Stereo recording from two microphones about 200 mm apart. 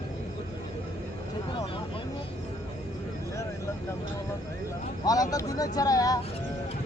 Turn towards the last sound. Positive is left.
turn(degrees=20)  # may be behind; listen again after turning